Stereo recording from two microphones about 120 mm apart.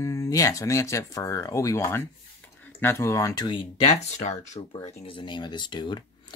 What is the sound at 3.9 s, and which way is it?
Speech, 75° left (ahead or behind).